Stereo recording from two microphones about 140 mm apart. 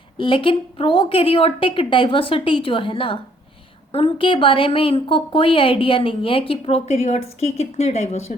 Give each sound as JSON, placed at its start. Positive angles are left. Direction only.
{"t": 0.2, "sound": "a woman's voice", "side_deg": 40}